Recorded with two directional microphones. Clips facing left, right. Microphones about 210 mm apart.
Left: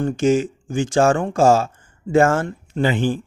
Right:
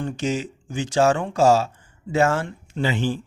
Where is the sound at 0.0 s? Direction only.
45° left (ahead or behind).